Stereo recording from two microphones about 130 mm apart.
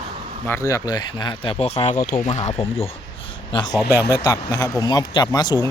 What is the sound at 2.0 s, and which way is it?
Speech, 80° left.